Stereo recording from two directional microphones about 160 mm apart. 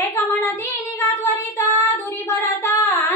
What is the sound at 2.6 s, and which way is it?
Female singing, 20° left (ahead or behind).